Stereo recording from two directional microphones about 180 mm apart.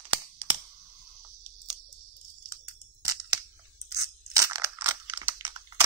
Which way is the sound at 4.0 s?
20° right (ahead or behind).